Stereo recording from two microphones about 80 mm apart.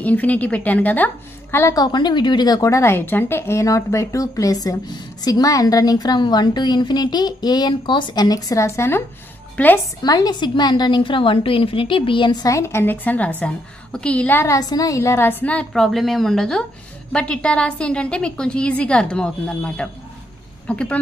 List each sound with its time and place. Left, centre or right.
0.0 s a woman's voice: centre
1.8 s speech: left
2.7 s speech: left
8.6 s a woman's voice: left
9.6 s a woman's voice: centre
10.0 s speech: left
10.5 s a woman's voice: left
12.4 s a woman's voice: left; by 14.3 s centre
14.3 s a woman's voice: left
14.6 s a woman's voice: left
15.7 s a woman's voice: centre